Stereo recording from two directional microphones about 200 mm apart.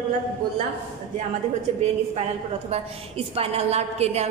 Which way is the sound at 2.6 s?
30° right (ahead or behind).